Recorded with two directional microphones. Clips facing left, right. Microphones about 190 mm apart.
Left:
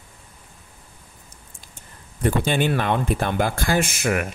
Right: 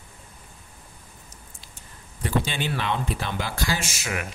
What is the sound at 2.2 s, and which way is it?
Speech, 50° left (ahead or behind).